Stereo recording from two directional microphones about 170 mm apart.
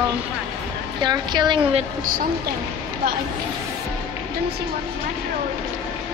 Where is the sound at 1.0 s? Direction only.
25° right (ahead or behind).